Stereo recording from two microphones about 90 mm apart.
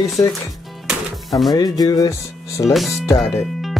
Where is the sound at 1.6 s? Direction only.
45° left (ahead or behind).